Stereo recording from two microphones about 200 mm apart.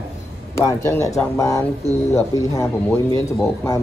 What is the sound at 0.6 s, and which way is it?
Speech, 15° left (ahead or behind).